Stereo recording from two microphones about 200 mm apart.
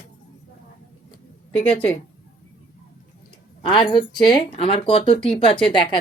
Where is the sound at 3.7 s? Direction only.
20° left (ahead or behind).